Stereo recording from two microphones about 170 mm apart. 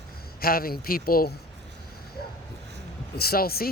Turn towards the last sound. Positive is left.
turn(degrees=60)  # may be behind; listen again after turning